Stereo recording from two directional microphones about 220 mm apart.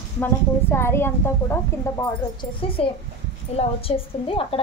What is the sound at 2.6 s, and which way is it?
Speech, 25° left (ahead or behind).